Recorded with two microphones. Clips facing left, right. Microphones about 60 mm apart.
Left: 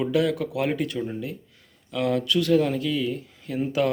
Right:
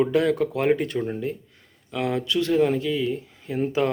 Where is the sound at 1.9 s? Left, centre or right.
Right.